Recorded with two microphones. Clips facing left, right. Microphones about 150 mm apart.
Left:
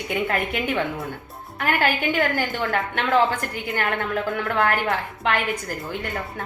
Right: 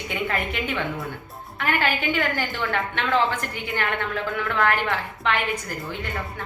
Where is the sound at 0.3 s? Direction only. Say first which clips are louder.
Left 2 dB; 45° left (ahead or behind).